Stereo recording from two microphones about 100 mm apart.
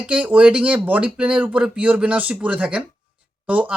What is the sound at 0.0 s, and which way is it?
Speech, 15° right (ahead or behind).